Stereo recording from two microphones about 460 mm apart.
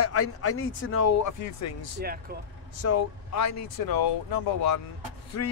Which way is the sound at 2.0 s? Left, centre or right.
Centre.